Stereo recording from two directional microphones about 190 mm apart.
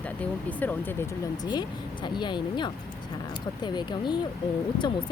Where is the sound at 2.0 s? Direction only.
25° left (ahead or behind).